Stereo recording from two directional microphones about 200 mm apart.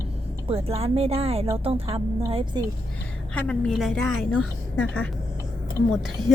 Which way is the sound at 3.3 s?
5° left (ahead or behind).